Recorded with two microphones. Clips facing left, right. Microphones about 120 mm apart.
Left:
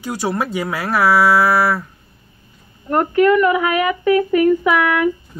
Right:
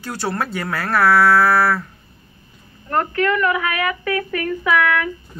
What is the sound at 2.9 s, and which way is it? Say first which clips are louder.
Speech: left 6 dB; 15° left (ahead or behind).